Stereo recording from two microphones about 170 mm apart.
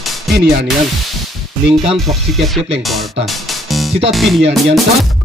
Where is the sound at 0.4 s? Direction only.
75° right (ahead or behind).